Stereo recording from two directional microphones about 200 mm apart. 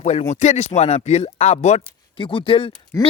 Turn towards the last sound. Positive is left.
turn(degrees=25)  # may be behind; listen again after turning